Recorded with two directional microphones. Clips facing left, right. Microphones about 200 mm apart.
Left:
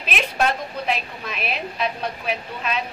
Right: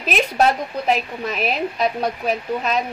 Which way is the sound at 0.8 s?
40° right (ahead or behind).